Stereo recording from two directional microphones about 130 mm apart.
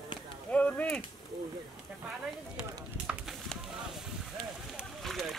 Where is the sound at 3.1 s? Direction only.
10° right (ahead or behind).